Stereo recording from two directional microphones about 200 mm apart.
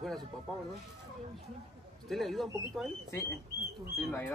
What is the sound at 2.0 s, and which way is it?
Speech, centre (ahead or behind).